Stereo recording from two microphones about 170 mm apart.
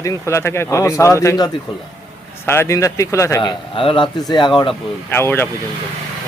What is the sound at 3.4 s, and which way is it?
Speech, 30° left (ahead or behind).